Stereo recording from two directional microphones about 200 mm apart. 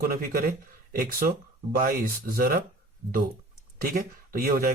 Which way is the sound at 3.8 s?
45° right (ahead or behind).